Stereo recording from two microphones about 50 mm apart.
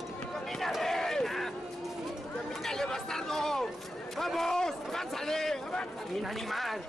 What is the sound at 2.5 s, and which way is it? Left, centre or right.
Chatter, centre.